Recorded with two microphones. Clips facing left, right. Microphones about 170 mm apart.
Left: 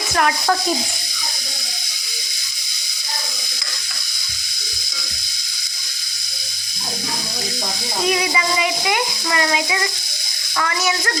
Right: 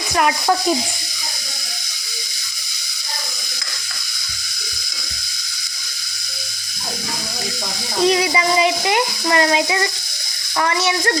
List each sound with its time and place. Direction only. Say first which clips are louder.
0.2 s frying: right 1 dB; 10° right (ahead or behind)
8.1 s a sound: right 4 dB; 30° right (ahead or behind)
10.6 s speech: right 3 dB; 30° right (ahead or behind)